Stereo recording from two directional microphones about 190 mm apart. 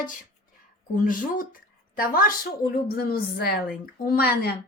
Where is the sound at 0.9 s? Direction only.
45° left (ahead or behind).